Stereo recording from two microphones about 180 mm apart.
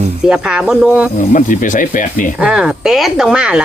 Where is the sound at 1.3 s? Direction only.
45° left (ahead or behind).